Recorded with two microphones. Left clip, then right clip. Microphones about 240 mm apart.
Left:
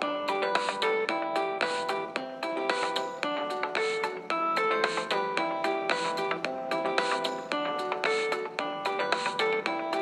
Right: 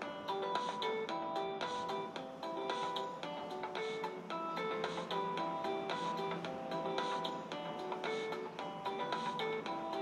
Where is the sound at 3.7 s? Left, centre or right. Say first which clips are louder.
Left 10 dB; left.